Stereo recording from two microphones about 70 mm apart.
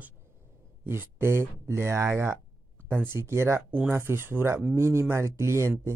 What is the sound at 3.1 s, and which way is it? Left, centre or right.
Speech, right.